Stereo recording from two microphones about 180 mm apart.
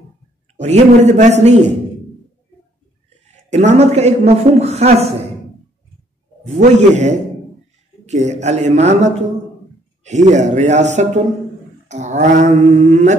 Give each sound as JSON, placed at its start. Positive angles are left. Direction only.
{"t": 0.6, "sound": "a man's voice", "side_deg": -40}
{"t": 3.4, "sound": "a man's voice", "side_deg": -40}
{"t": 6.4, "sound": "a man's voice", "side_deg": -40}